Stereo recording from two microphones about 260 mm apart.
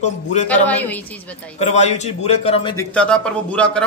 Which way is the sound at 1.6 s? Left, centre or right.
Left.